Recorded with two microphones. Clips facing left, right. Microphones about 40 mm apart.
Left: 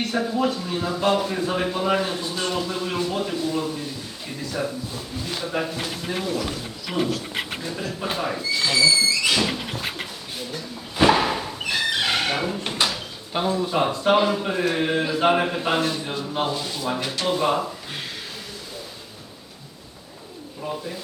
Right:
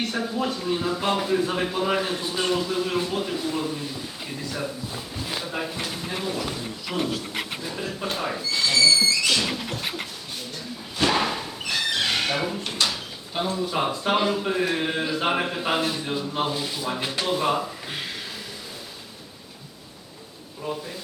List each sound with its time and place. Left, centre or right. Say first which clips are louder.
0.0 s a man's voice: left 3 dB; centre
4.4 s a sound: left 4 dB; centre
4.9 s a man's voice: left 1 dB; centre
10.5 s a sound: left 2 dB; centre
12.6 s drawer open or close: left 2 dB; centre
13.4 s a man's voice: left 3 dB; centre